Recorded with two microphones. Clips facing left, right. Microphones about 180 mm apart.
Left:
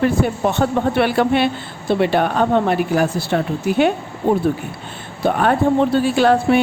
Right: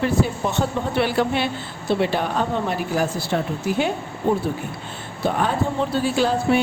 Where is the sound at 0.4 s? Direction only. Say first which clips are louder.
Left 6 dB; 60° left (ahead or behind).